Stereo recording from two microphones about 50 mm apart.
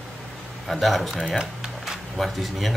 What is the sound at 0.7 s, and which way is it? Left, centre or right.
Speech, centre.